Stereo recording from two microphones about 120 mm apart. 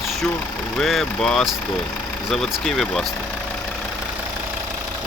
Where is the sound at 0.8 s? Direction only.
5° left (ahead or behind).